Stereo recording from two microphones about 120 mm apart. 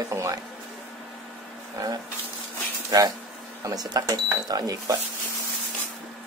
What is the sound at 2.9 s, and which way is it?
Speech, 30° right (ahead or behind).